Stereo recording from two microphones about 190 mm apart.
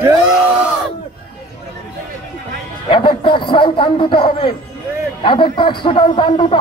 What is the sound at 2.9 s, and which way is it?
Music, 25° left (ahead or behind).